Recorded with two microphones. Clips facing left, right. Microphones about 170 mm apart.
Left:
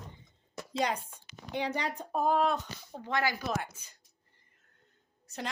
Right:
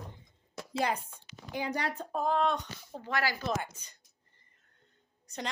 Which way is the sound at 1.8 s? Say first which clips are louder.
Left 2 dB; 15° left (ahead or behind).